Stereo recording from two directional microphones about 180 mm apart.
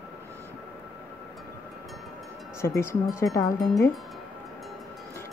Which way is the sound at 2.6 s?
15° left (ahead or behind).